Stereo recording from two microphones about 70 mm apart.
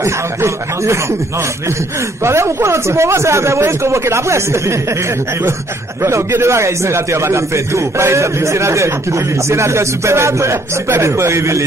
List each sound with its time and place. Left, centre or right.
0.0 s speech: right
2.2 s speech: right
6.0 s speech: right